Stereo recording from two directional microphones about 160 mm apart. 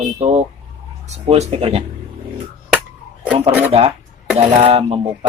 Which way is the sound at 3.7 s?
40° right (ahead or behind).